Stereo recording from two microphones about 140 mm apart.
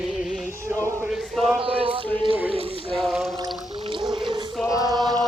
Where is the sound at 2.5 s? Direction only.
40° right (ahead or behind).